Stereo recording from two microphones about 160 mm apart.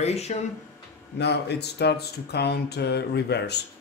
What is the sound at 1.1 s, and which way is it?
Speech, 90° left.